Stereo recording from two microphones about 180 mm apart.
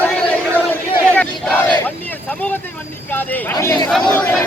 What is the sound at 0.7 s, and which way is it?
Battle cry, 10° left (ahead or behind).